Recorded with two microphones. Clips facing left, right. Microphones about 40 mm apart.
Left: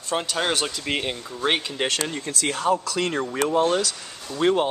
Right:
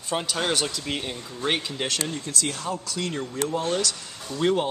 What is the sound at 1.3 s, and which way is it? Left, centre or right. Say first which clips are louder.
Speech: left 2 dB; left.